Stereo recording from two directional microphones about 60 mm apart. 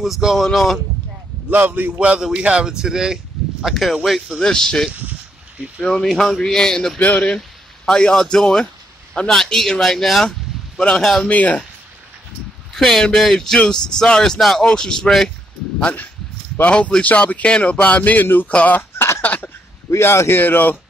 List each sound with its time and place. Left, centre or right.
0.0 s speech: centre
1.5 s a man's voice: right
2.0 s speech: centre
3.7 s speech: centre
4.4 s speech: centre
7.0 s speech: left; by 10.3 s centre
10.8 s speech: centre
12.7 s speech: centre
16.6 s speech: left
18.8 s a sound: left
19.2 s throat clearing: left
20.0 s a man's voice: left